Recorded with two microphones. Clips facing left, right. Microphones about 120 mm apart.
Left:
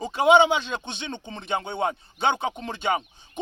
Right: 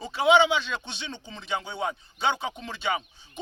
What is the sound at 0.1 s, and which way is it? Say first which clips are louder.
Speech: left 3 dB; 45° left (ahead or behind).